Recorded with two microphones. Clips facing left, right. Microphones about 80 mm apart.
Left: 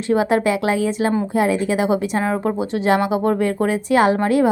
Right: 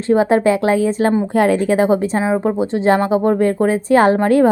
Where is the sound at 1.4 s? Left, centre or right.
Right.